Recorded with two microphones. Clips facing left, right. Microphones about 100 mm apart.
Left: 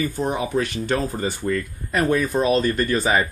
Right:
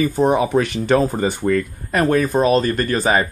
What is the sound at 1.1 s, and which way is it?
Speech, 55° right (ahead or behind).